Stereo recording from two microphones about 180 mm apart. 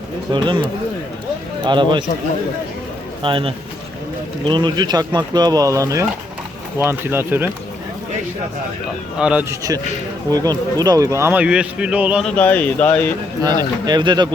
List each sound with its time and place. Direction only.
0.3 s speech: 25° right (ahead or behind)
3.2 s speech: 30° right (ahead or behind); by 7.5 s 10° right (ahead or behind)
9.1 s speech: 5° right (ahead or behind)
10.3 s speech: 20° right (ahead or behind)
12.4 s speech: 10° left (ahead or behind)
13.4 s speech: 20° right (ahead or behind)